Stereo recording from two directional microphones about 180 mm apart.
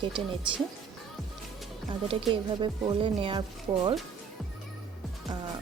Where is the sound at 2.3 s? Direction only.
30° right (ahead or behind).